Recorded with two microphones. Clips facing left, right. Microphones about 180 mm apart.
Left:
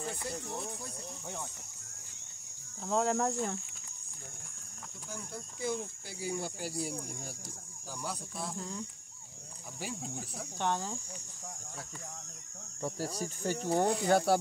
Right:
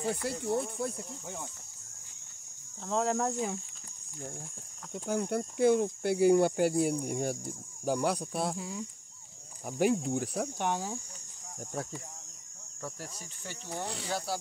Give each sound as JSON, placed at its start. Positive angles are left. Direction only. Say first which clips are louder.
{"t": 0.3, "sound": "speech", "louder": "right 8 dB", "side_deg": -65}
{"t": 2.8, "sound": "speech", "louder": "even", "side_deg": 0}
{"t": 4.9, "sound": "speech", "louder": "right 14 dB", "side_deg": -70}
{"t": 8.5, "sound": "cricket", "louder": "right 2 dB", "side_deg": -5}
{"t": 9.7, "sound": "speech", "louder": "right 14 dB", "side_deg": -60}
{"t": 10.6, "sound": "cricket", "louder": "left 2 dB", "side_deg": -10}
{"t": 12.8, "sound": "speech", "louder": "left 7 dB", "side_deg": 35}
{"t": 14.0, "sound": "speech", "louder": "left 7 dB", "side_deg": 60}